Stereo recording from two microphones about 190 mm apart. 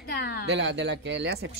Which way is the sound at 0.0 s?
55° left (ahead or behind).